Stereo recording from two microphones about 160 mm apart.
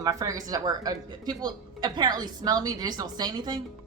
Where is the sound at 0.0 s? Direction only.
20° right (ahead or behind).